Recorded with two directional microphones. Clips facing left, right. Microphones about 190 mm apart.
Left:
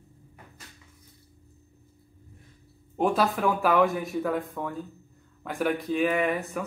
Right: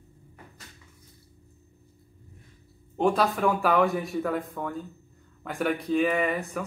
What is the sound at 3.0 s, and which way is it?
Speech, centre (ahead or behind).